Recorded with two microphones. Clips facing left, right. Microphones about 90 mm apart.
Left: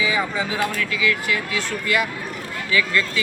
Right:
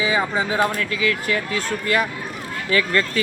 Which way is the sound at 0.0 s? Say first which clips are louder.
Right 2 dB; 35° right (ahead or behind).